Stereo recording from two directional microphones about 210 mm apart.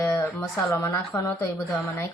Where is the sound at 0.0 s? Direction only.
15° left (ahead or behind).